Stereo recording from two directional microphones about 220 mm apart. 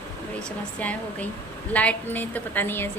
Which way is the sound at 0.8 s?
5° left (ahead or behind).